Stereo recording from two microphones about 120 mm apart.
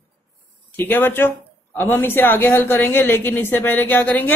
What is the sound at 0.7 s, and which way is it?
Speech, 15° left (ahead or behind).